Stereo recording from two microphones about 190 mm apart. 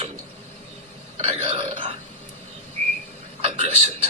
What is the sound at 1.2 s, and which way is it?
Speech, 30° right (ahead or behind).